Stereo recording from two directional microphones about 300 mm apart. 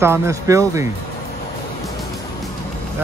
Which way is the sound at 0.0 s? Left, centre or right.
Centre.